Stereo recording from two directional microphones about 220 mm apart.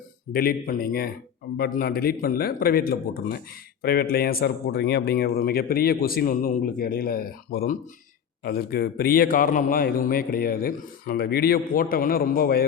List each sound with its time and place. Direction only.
0.3 s a man's voice: 40° left (ahead or behind)